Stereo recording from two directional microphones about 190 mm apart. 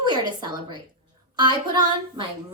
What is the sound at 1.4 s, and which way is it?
Child singing, 25° right (ahead or behind).